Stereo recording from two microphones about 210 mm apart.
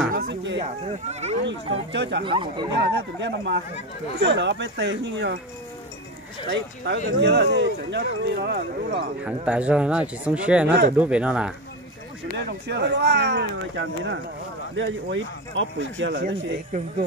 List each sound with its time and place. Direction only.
0.1 s a sound: 40° right (ahead or behind)
0.6 s speech: 30° right (ahead or behind)
1.4 s speech: 55° right (ahead or behind)
2.2 s speech: 25° right (ahead or behind)
2.8 s speech: 55° right (ahead or behind)
6.5 s speech: 55° right (ahead or behind)
9.2 s speech: 5° right (ahead or behind)
12.4 s speech: 55° right (ahead or behind)